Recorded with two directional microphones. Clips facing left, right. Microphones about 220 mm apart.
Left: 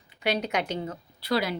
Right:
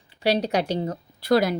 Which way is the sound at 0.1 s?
30° right (ahead or behind).